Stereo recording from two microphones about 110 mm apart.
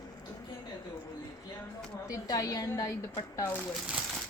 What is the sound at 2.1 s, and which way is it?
A woman's voice, 35° left (ahead or behind).